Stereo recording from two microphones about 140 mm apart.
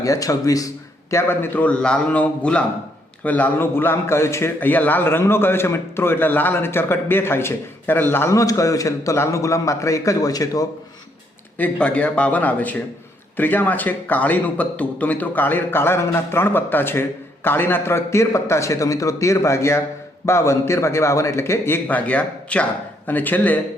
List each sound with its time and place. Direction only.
0.0 s a man's voice: 25° left (ahead or behind)
11.5 s a man's voice: 10° left (ahead or behind)